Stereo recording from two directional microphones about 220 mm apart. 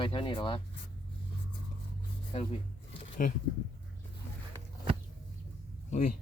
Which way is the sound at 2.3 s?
25° left (ahead or behind).